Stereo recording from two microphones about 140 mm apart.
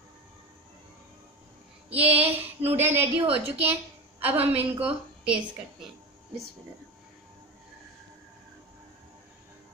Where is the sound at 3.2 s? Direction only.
45° right (ahead or behind).